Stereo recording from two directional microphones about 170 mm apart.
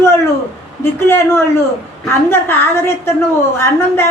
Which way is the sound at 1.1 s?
15° left (ahead or behind).